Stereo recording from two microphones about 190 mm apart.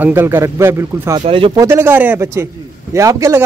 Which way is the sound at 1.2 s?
25° right (ahead or behind).